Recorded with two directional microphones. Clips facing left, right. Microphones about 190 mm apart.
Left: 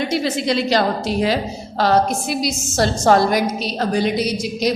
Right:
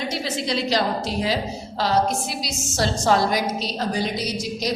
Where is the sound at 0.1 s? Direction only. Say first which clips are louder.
Left 6 dB; 60° left (ahead or behind).